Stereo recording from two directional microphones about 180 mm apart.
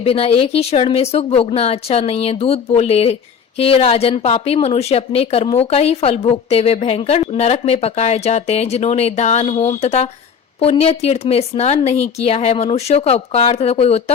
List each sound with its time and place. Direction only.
0.0 s speech: 35° left (ahead or behind)